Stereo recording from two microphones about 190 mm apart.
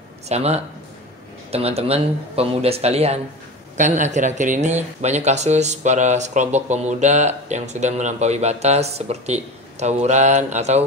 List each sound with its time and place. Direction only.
0.3 s speech: 35° right (ahead or behind)